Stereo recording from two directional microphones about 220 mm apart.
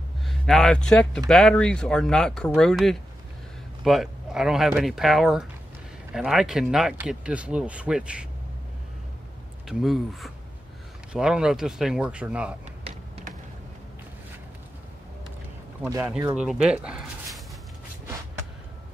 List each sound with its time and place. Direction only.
0.2 s speech: centre (ahead or behind)
9.7 s speech: centre (ahead or behind)
12.8 s a sound: 25° right (ahead or behind)
15.8 s speech: 10° right (ahead or behind)